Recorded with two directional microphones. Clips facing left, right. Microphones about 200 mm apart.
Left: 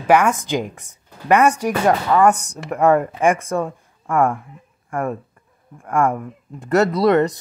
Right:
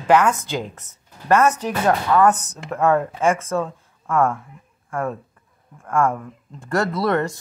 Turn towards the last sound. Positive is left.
turn(degrees=20)  # may be behind; listen again after turning